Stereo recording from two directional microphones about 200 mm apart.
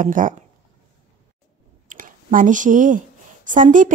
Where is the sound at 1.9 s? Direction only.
40° right (ahead or behind).